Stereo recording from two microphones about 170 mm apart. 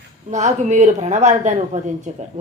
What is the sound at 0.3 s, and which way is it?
Speech, 45° right (ahead or behind).